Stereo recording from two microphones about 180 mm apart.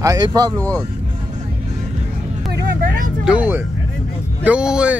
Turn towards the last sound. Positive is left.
turn(degrees=-5)  # may be behind; listen again after turning